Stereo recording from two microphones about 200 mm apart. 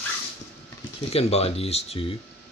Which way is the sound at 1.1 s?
30° left (ahead or behind).